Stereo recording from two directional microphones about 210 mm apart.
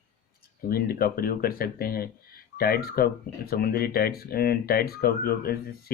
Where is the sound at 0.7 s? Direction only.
45° left (ahead or behind).